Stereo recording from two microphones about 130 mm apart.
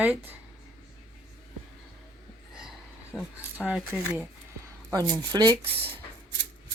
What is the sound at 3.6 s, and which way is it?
Speech, 5° right (ahead or behind).